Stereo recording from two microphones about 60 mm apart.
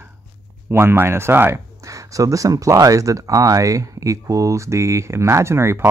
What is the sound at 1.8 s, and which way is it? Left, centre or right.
Speech, right.